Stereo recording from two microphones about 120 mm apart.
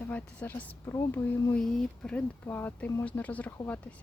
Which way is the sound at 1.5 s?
5° left (ahead or behind).